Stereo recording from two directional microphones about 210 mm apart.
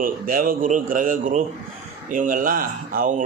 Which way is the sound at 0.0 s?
40° right (ahead or behind).